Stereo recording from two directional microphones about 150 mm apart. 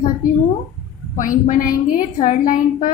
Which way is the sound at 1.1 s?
60° left (ahead or behind).